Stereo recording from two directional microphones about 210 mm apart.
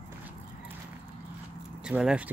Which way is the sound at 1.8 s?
5° right (ahead or behind).